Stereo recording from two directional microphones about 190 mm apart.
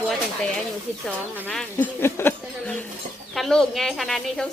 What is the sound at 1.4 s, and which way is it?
Speech, 10° left (ahead or behind).